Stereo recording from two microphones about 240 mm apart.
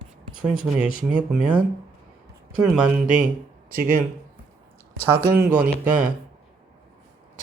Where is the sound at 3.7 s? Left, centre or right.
Right.